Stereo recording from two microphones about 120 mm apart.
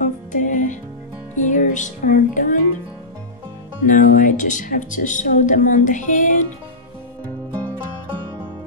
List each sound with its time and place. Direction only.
0.0 s music: 90° left
3.8 s speech: 90° left